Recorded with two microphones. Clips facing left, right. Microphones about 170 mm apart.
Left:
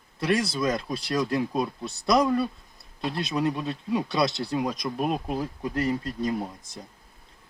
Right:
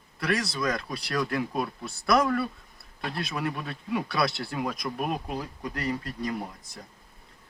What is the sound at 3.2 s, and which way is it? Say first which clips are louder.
Speech: left 7 dB; 20° left (ahead or behind).